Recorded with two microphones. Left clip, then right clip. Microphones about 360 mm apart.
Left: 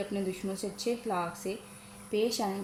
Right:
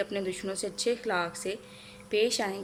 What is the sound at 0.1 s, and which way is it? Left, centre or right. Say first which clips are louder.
Speech: right 2 dB; right.